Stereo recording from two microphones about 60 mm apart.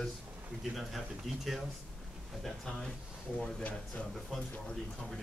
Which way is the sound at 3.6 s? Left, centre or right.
Left.